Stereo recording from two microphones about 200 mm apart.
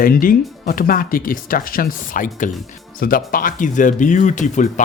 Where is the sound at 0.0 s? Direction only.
45° left (ahead or behind).